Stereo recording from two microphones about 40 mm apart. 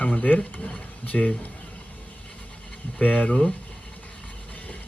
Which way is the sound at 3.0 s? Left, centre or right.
Left.